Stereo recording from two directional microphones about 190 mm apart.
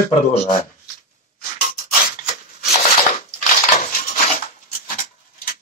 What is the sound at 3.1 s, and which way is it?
Crushing, 40° left (ahead or behind).